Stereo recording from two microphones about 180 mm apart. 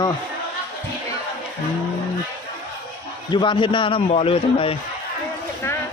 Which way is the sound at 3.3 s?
25° left (ahead or behind).